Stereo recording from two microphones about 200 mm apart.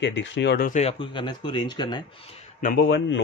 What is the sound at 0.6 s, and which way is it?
Speech, 35° left (ahead or behind).